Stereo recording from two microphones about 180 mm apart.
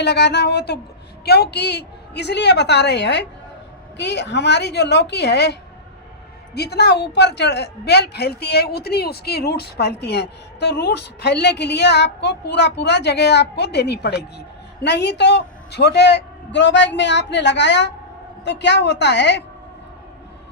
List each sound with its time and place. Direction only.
0.0 s a man's voice: 70° left (ahead or behind)